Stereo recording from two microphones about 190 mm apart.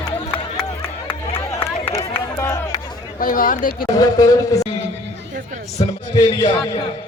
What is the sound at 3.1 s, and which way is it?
Speech, 45° left (ahead or behind).